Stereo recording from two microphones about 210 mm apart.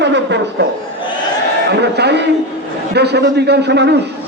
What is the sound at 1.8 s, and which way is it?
A man's voice, 55° right (ahead or behind).